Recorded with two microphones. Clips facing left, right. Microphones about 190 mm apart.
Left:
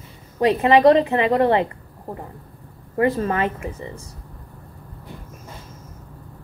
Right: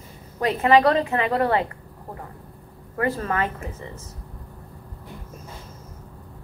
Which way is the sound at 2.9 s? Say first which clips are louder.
Left 5 dB; 25° left (ahead or behind).